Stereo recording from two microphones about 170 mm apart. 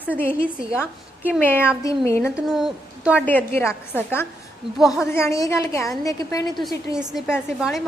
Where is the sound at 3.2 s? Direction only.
10° left (ahead or behind).